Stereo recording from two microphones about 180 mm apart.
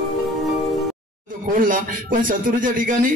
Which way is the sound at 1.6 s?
50° right (ahead or behind).